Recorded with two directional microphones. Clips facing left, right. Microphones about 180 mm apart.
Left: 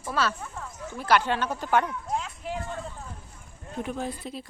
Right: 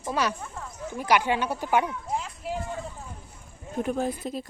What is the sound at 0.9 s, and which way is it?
Speech, 15° right (ahead or behind).